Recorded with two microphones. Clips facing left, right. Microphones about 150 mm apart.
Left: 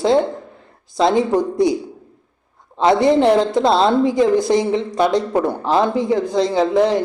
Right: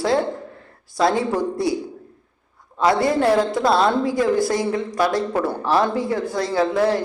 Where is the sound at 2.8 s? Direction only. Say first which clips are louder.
Left 4 dB; 20° left (ahead or behind).